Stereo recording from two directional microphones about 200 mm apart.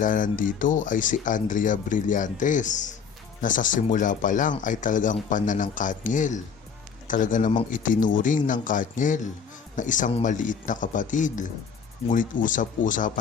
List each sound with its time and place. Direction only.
0.0 s speech: 40° left (ahead or behind)